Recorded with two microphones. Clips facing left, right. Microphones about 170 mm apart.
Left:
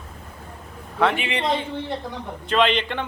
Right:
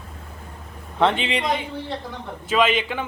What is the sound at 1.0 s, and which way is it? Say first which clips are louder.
Speech: right 1 dB; 25° right (ahead or behind).